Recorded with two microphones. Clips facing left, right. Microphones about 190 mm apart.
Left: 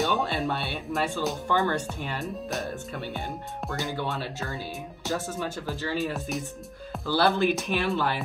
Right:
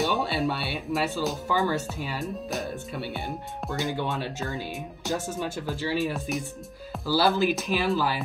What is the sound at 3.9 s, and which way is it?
Speech, 15° right (ahead or behind).